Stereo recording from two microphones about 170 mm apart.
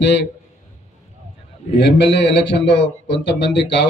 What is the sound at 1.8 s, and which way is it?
A man's voice, 90° left.